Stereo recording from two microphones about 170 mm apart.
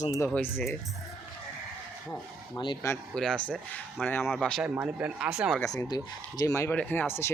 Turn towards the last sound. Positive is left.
turn(degrees=15)  # may be behind; listen again after turning